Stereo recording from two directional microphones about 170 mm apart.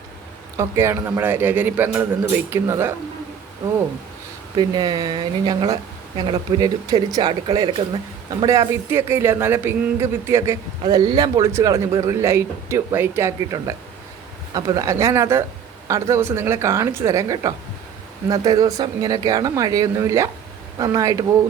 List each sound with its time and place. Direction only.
0.5 s a man's voice: 15° right (ahead or behind)
4.5 s a man's voice: 25° right (ahead or behind)